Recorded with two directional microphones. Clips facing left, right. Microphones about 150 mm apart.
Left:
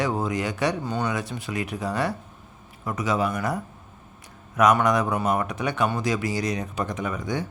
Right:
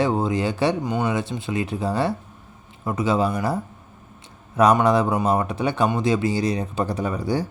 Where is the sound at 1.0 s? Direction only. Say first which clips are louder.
Right 4 dB; 25° right (ahead or behind).